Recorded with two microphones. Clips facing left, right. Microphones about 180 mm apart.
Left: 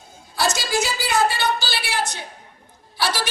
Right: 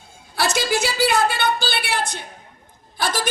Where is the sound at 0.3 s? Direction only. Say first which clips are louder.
Right 1 dB; 60° right (ahead or behind).